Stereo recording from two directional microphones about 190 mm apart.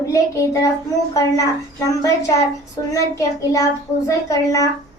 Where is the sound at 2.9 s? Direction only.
15° left (ahead or behind).